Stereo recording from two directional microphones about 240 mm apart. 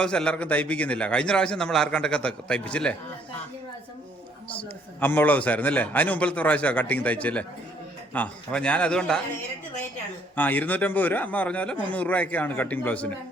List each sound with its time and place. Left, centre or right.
0.0 s a man's voice: centre
4.5 s a man's voice: centre
10.3 s a man's voice: centre